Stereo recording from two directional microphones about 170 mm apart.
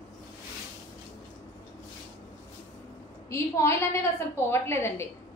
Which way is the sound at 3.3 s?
15° left (ahead or behind).